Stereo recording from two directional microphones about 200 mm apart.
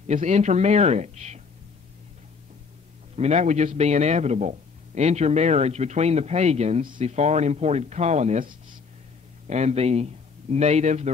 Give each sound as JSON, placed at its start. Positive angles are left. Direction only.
{"t": 0.0, "sound": "a man's voice", "side_deg": -35}
{"t": 3.2, "sound": "a man's voice", "side_deg": -35}
{"t": 9.5, "sound": "a man's voice", "side_deg": -35}